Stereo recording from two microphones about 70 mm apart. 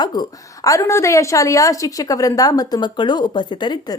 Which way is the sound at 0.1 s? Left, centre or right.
Left.